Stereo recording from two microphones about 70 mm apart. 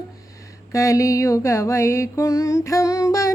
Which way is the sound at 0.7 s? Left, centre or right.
Left.